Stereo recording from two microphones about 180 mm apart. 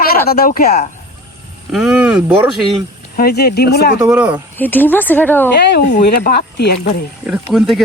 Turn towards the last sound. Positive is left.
turn(degrees=0)  # may be behind; listen again after turning